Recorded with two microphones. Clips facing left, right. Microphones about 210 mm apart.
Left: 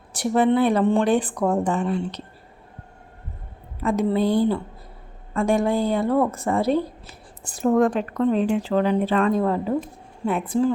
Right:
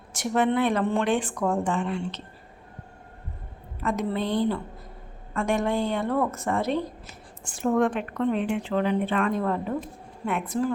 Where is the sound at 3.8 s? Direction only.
30° left (ahead or behind).